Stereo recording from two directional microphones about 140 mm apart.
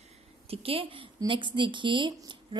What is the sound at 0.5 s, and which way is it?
A woman's voice, 40° right (ahead or behind).